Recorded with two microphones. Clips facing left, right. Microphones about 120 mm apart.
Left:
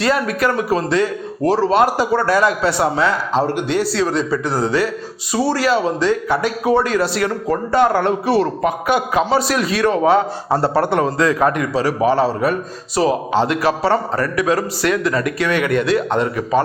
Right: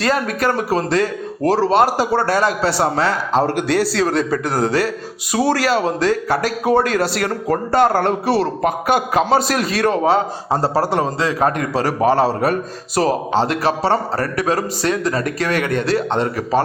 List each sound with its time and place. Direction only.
0.0 s speech: 40° right (ahead or behind)
3.9 s speech: 50° right (ahead or behind); by 11.7 s 35° right (ahead or behind)
11.7 s a man's voice: 55° right (ahead or behind)
13.0 s speech: 55° right (ahead or behind)
13.3 s speech: 30° right (ahead or behind)